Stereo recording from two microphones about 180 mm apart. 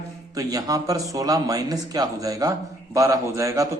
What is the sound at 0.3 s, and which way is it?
A man's voice, 20° right (ahead or behind).